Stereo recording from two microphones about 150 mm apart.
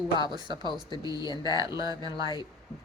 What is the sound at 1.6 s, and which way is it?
Speech, 25° right (ahead or behind).